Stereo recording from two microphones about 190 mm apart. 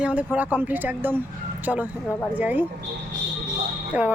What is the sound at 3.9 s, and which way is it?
Speech, 10° right (ahead or behind).